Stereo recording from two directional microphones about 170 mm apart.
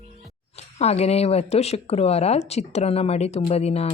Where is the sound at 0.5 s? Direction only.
40° left (ahead or behind).